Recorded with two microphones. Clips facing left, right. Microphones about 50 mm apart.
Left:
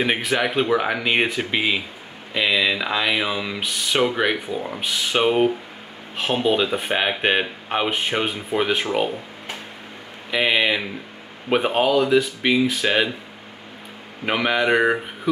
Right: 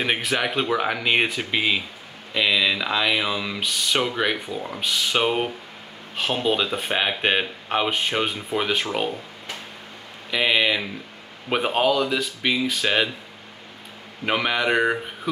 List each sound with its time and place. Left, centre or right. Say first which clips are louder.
0.0 s speech: left 2 dB; centre
10.3 s speech: left 1 dB; centre
14.2 s speech: left 2 dB; centre